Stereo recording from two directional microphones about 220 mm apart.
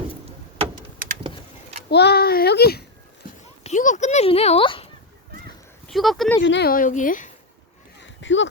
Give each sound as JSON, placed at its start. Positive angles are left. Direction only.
{"t": 1.9, "sound": "a child's voice", "side_deg": 50}
{"t": 3.6, "sound": "a child's voice", "side_deg": 35}
{"t": 5.9, "sound": "speech", "side_deg": 0}
{"t": 6.4, "sound": "a woman's voice", "side_deg": 50}
{"t": 8.0, "sound": "a sound", "side_deg": 55}